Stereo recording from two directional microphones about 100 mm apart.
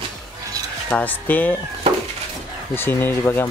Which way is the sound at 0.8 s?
15° left (ahead or behind).